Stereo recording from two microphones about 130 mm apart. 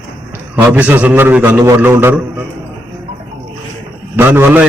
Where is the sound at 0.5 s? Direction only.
15° right (ahead or behind).